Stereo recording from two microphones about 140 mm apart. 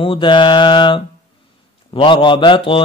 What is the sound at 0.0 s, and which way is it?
Mantra, 35° left (ahead or behind).